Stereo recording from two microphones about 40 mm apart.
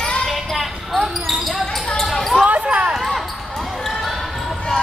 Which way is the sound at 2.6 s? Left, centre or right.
Right.